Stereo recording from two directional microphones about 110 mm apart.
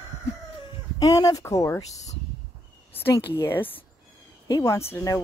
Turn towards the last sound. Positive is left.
turn(degrees=25)  # may be behind; listen again after turning